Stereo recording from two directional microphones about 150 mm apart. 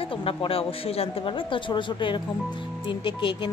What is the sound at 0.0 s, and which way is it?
Speech, 40° left (ahead or behind).